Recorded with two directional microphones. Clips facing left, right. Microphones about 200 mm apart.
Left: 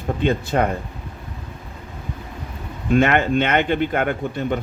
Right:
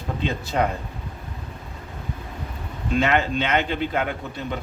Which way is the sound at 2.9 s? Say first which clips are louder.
Left 5 dB; 55° left (ahead or behind).